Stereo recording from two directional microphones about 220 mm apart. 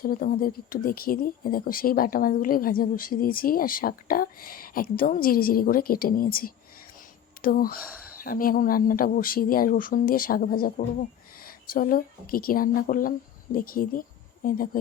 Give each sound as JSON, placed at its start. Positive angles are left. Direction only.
{"t": 0.0, "sound": "speech", "side_deg": 40}